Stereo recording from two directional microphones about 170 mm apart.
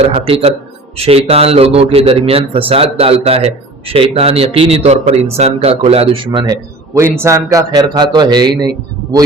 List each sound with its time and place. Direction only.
0.0 s a man's voice: 35° right (ahead or behind)